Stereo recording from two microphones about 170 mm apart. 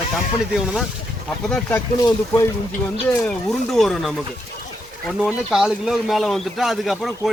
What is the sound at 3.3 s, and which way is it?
A man's voice, 5° left (ahead or behind).